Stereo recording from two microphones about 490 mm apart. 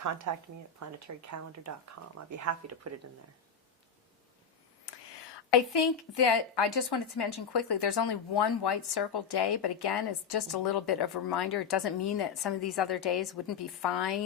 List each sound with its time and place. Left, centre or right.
0.3 s speech: right
5.7 s speech: left